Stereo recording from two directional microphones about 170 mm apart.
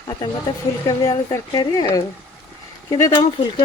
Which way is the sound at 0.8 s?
20° left (ahead or behind).